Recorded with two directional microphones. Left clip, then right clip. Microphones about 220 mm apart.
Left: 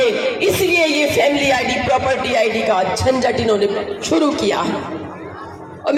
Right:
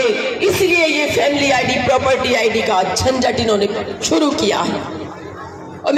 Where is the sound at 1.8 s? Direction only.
35° right (ahead or behind).